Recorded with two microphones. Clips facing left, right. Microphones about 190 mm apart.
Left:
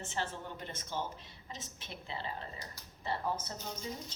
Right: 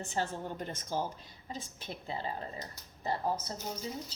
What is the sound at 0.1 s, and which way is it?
Speech, 40° right (ahead or behind).